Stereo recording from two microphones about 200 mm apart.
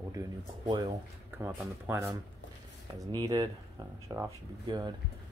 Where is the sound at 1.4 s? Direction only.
10° right (ahead or behind).